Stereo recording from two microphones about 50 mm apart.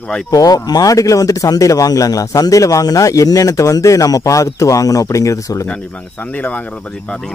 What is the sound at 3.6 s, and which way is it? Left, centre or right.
Speech, left.